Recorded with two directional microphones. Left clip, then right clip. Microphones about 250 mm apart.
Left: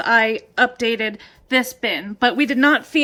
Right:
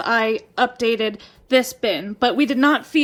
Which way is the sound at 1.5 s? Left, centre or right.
Right.